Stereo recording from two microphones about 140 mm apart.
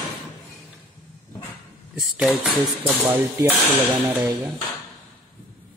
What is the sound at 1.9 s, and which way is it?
Speech, centre (ahead or behind).